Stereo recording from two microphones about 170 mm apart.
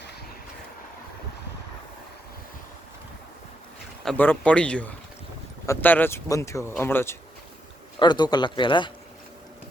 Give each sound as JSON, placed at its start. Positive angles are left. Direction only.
{"t": 4.0, "sound": "speech", "side_deg": 5}
{"t": 7.9, "sound": "speech", "side_deg": 25}